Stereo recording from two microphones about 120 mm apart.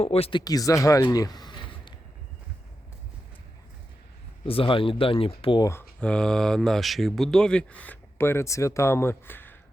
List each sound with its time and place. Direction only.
0.0 s speech: 55° left (ahead or behind)
0.3 s speech: 30° left (ahead or behind)
1.1 s a sound: 35° left (ahead or behind)
4.4 s speech: 50° left (ahead or behind)
5.5 s speech: 25° left (ahead or behind)
5.8 s speech: 5° left (ahead or behind)